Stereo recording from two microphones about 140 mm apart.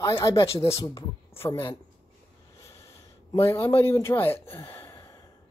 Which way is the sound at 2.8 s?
20° left (ahead or behind).